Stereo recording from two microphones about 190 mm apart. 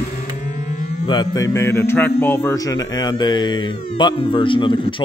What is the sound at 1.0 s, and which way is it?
A man's voice, 20° left (ahead or behind).